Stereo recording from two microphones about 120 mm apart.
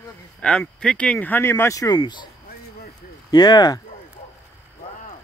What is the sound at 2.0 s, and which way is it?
Speech, 40° left (ahead or behind).